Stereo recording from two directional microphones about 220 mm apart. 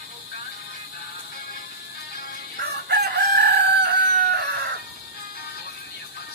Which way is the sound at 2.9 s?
50° right (ahead or behind).